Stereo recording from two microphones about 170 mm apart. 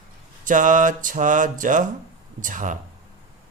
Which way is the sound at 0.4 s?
50° right (ahead or behind).